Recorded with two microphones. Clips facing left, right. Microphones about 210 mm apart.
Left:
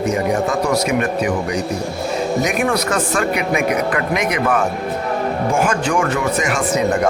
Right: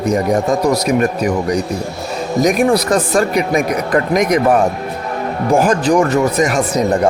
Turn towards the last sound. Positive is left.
turn(degrees=-35)  # may be behind; listen again after turning